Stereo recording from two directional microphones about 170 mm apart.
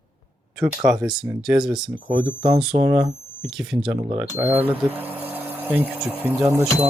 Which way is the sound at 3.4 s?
5° right (ahead or behind).